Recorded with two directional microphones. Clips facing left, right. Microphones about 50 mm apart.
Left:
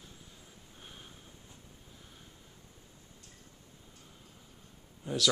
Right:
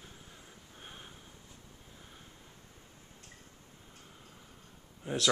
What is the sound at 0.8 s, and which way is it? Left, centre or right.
Sniff, centre.